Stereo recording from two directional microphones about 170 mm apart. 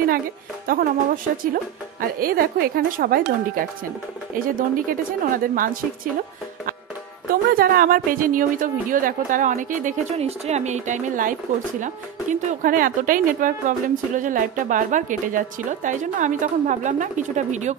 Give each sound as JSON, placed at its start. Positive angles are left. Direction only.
{"t": 0.7, "sound": "speech", "side_deg": -55}
{"t": 7.5, "sound": "speech", "side_deg": -60}